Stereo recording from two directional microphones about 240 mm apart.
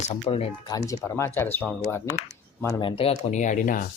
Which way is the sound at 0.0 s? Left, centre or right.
Left.